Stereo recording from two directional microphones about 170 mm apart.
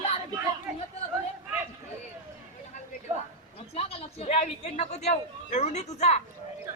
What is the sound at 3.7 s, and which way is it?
A man's voice, 35° left (ahead or behind).